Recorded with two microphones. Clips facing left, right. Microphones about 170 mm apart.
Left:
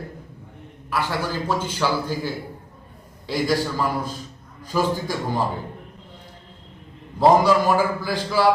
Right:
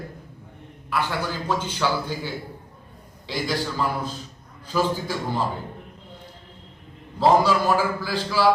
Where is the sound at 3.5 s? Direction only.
10° left (ahead or behind).